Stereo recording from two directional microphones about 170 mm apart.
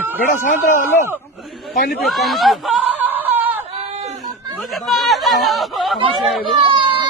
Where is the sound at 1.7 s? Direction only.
65° left (ahead or behind).